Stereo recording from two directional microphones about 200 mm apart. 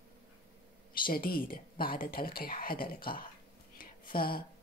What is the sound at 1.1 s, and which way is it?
Speech, 50° left (ahead or behind).